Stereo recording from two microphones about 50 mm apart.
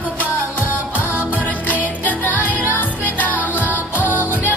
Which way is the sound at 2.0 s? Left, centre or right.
Left.